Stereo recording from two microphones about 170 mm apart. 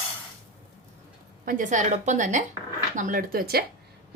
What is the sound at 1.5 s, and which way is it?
A woman's voice, 50° right (ahead or behind).